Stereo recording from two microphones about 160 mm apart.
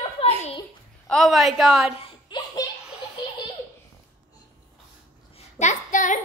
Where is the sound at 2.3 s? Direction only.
30° left (ahead or behind).